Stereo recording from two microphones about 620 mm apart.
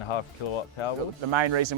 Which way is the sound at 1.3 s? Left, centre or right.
Right.